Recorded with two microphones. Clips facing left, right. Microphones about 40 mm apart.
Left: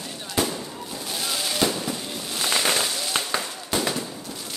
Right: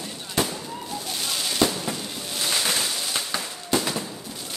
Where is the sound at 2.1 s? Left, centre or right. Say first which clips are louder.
Left 1 dB; centre.